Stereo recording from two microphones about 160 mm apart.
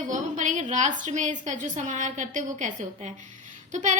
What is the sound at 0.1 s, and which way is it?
A woman's voice, 55° right (ahead or behind).